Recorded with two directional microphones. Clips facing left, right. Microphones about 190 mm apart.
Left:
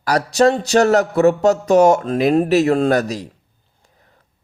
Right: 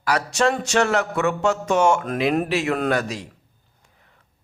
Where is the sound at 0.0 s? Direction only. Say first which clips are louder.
Left 6 dB; 35° left (ahead or behind).